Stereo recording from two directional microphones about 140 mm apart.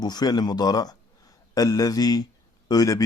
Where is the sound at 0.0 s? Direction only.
30° left (ahead or behind).